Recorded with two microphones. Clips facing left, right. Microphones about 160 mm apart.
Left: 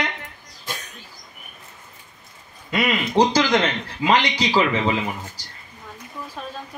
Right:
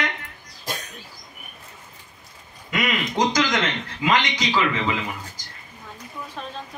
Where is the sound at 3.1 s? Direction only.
35° left (ahead or behind).